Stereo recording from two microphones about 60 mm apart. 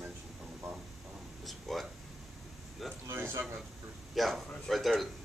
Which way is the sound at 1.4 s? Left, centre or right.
Centre.